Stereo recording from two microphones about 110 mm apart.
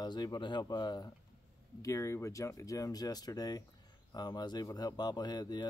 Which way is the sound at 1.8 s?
25° left (ahead or behind).